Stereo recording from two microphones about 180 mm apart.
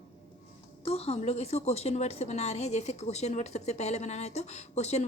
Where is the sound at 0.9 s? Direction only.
35° left (ahead or behind).